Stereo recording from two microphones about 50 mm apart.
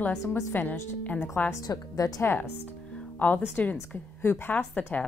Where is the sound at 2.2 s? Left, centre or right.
Left.